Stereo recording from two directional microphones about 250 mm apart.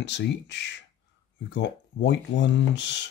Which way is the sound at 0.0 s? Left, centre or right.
Left.